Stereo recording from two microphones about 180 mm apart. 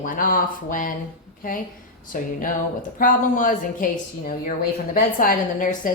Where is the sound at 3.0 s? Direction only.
50° left (ahead or behind).